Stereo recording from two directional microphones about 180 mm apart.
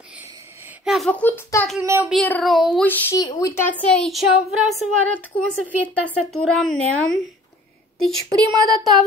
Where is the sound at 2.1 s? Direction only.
5° left (ahead or behind).